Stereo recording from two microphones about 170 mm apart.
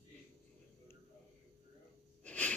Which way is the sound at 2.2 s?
10° left (ahead or behind).